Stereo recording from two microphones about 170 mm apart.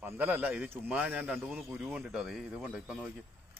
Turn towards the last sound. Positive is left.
turn(degrees=-5)  # may be behind; listen again after turning